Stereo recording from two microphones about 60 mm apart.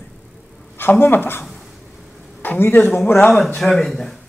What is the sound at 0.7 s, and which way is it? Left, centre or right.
A man's voice, left.